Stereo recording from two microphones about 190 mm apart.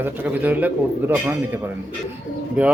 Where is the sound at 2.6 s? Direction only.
5° right (ahead or behind).